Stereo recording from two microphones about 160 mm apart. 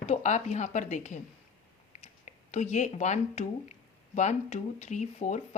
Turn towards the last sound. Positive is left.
turn(degrees=50)  # may be behind; listen again after turning